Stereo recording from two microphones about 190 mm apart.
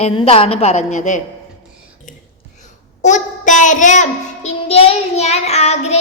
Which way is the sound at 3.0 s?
40° left (ahead or behind).